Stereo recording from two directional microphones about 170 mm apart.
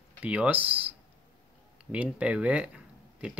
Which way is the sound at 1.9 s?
5° right (ahead or behind).